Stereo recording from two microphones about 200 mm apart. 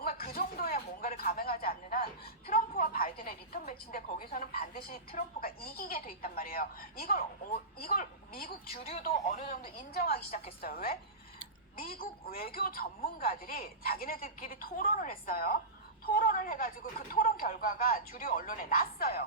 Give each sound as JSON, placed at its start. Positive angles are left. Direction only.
{"t": 0.0, "sound": "a woman's voice", "side_deg": 45}
{"t": 8.8, "sound": "speech", "side_deg": 35}
{"t": 10.0, "sound": "a woman's voice", "side_deg": 50}